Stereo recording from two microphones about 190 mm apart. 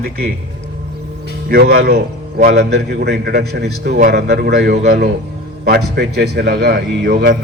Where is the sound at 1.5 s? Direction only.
55° right (ahead or behind).